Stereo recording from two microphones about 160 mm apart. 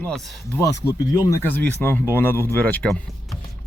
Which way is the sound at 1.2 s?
15° left (ahead or behind).